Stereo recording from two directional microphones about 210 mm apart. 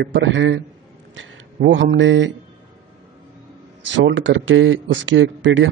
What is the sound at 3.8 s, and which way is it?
A man's voice, 60° right (ahead or behind).